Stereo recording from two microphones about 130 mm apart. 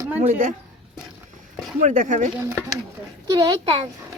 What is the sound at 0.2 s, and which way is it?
Speech, 70° right (ahead or behind).